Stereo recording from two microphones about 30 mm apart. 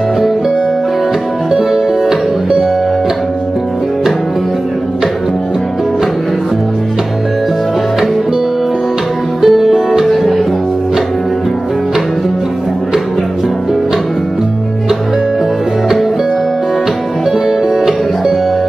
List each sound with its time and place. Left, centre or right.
1.5 s music: centre
9.4 s music: centre
17.5 s music: centre